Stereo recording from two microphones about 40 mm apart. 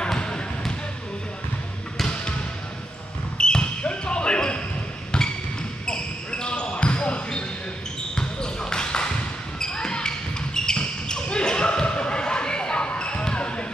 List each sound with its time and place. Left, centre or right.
0.0 s basketball bounce: left
3.3 s basketball bounce: left
5.9 s basketball bounce: left
8.1 s basketball bounce: centre